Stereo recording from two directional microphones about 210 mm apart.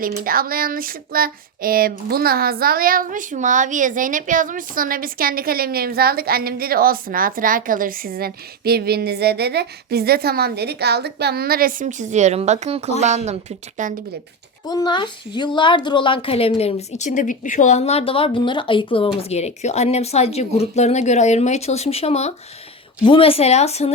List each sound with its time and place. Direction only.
0.0 s a sound: 45° right (ahead or behind)
13.0 s a woman's voice: 30° right (ahead or behind)
14.7 s a woman's voice: 20° left (ahead or behind)